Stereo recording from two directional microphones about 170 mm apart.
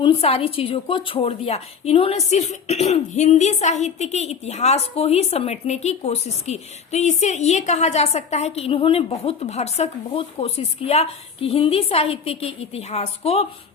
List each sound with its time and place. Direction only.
0.0 s a woman's voice: 35° left (ahead or behind)